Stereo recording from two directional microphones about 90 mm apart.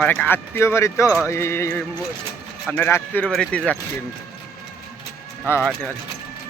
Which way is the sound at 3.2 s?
10° left (ahead or behind).